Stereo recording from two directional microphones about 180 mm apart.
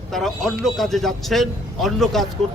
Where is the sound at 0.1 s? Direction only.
Centre (ahead or behind).